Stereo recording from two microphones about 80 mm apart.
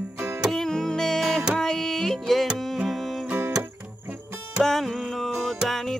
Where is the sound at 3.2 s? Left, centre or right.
Right.